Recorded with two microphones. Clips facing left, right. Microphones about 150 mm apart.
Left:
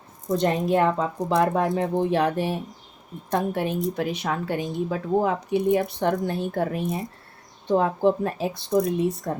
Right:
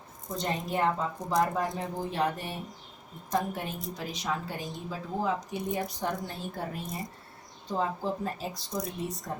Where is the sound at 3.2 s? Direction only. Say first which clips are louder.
Left 6 dB; 70° left (ahead or behind).